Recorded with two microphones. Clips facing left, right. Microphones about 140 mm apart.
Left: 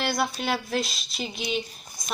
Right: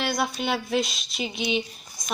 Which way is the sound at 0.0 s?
Centre (ahead or behind).